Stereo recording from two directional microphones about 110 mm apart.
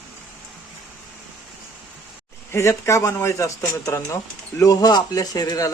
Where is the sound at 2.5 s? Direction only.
25° left (ahead or behind).